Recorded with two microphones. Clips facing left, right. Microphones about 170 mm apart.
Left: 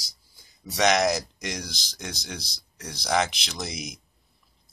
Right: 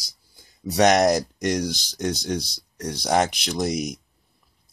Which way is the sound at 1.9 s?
35° right (ahead or behind).